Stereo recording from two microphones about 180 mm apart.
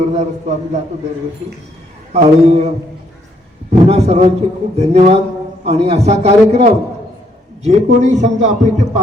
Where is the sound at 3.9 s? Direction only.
35° right (ahead or behind).